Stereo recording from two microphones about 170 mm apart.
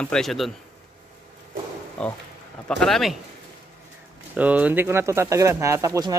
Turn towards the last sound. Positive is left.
turn(degrees=-20)  # may be behind; listen again after turning